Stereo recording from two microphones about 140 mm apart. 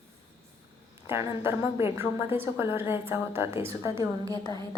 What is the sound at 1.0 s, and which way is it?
A woman's voice, 15° right (ahead or behind).